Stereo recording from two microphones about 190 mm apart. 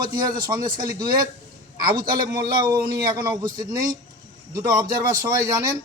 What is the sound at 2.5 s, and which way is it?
Speech, 20° right (ahead or behind).